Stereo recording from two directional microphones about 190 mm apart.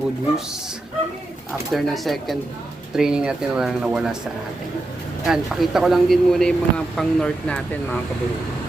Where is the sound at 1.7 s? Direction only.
Centre (ahead or behind).